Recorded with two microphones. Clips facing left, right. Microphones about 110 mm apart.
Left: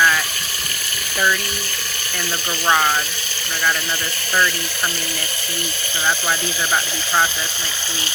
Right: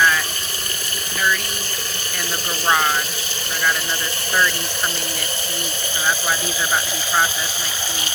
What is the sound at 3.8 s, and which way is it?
Speech, 25° right (ahead or behind).